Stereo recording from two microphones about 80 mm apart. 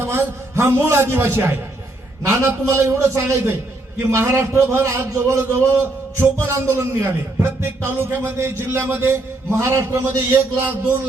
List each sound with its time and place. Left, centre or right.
0.0 s a man's voice: right
10.3 s a man's voice: right